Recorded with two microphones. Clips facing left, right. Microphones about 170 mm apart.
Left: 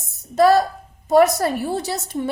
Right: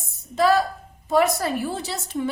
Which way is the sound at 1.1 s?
40° left (ahead or behind).